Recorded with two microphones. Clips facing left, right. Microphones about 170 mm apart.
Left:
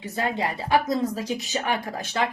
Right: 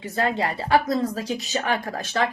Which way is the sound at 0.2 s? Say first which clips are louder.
Right 3 dB; 15° left (ahead or behind).